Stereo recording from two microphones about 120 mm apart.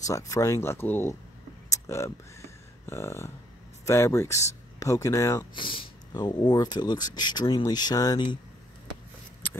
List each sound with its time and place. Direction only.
0.0 s speech: 30° left (ahead or behind)
1.7 s a sound: 25° left (ahead or behind)
3.8 s speech: 20° left (ahead or behind)
5.6 s speech: 45° left (ahead or behind)